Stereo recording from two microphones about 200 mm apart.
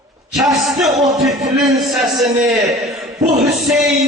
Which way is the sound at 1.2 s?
Centre (ahead or behind).